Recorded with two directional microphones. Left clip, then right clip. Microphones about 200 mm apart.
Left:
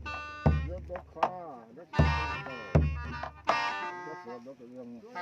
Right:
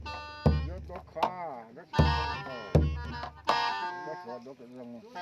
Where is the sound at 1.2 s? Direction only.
65° right (ahead or behind).